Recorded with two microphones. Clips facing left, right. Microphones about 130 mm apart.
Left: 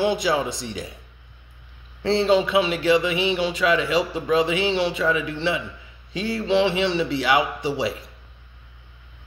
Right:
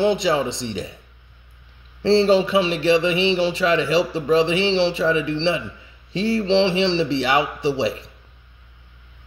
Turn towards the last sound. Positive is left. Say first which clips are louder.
# right 3 dB
turn(degrees=-25)  # may be behind; listen again after turning